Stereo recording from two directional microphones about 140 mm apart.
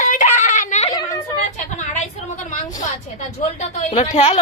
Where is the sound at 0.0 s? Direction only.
65° left (ahead or behind).